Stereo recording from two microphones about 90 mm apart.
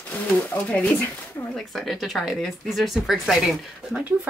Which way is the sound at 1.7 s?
Centre (ahead or behind).